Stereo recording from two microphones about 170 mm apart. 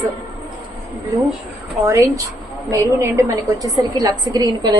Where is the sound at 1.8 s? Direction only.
15° right (ahead or behind).